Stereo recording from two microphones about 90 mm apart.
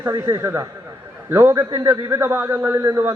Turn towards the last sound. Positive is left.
turn(degrees=-25)  # may be behind; listen again after turning